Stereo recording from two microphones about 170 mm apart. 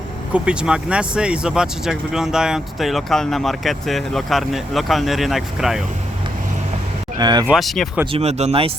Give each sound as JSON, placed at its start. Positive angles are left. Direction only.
{"t": 0.3, "sound": "speech", "side_deg": -5}
{"t": 7.2, "sound": "speech", "side_deg": -25}
{"t": 7.4, "sound": "speech", "side_deg": 0}
{"t": 8.1, "sound": "speech", "side_deg": -40}